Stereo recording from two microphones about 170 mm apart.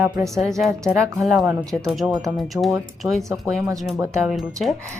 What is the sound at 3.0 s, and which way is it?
Speech, 15° right (ahead or behind).